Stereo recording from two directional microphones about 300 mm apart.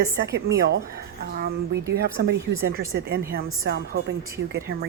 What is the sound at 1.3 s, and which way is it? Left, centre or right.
Speech, right.